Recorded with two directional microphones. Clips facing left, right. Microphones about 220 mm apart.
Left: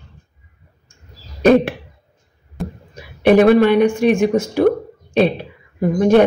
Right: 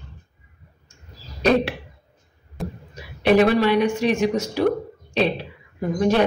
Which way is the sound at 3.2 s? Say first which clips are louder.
Left 6 dB; 50° left (ahead or behind).